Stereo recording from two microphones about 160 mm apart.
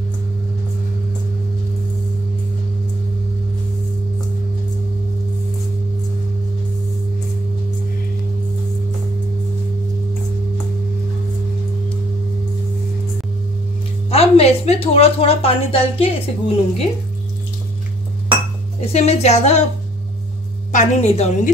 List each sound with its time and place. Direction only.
14.1 s a woman's voice: 40° left (ahead or behind)
18.9 s a woman's voice: 40° left (ahead or behind)
20.7 s a woman's voice: 45° left (ahead or behind)